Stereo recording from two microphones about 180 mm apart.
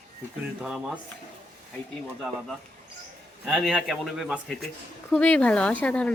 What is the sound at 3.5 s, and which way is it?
Speech, centre (ahead or behind).